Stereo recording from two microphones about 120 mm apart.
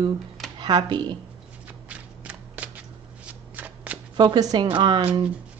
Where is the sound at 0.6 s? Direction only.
35° right (ahead or behind).